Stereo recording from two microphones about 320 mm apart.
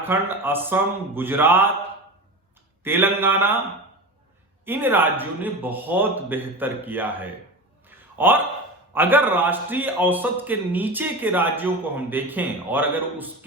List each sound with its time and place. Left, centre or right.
0.0 s speech: centre
2.8 s speech: centre
4.6 s a man's voice: centre
7.9 s a sound: centre
8.9 s a man's voice: centre